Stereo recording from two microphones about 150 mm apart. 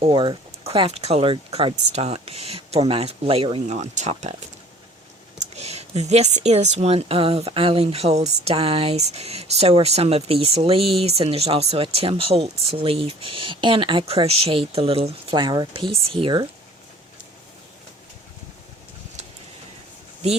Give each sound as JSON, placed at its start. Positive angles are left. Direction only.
{"t": 0.0, "sound": "speech", "side_deg": -35}
{"t": 3.7, "sound": "speech", "side_deg": -50}